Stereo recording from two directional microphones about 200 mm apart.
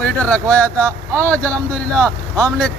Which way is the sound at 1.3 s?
5° left (ahead or behind).